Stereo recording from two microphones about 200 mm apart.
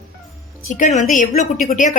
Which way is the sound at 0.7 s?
40° left (ahead or behind).